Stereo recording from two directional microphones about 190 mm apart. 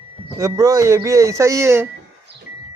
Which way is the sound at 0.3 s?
15° right (ahead or behind).